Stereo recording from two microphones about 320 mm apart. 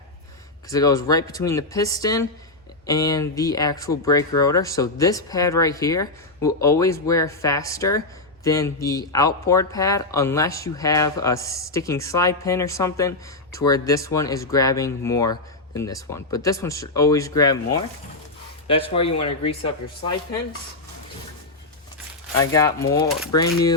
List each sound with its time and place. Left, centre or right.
0.7 s speech: centre
22.4 s speech: centre